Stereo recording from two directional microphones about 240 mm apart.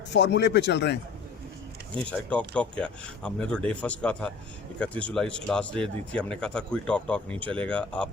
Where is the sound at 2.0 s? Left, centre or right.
Centre.